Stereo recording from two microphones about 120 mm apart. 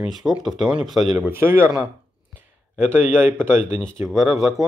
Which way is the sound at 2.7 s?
15° right (ahead or behind).